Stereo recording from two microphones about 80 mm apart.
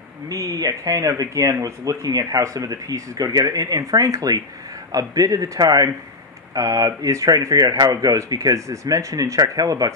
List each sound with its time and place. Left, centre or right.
0.3 s speech: right